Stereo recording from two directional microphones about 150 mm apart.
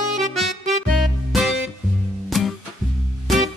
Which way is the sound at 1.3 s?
Centre (ahead or behind).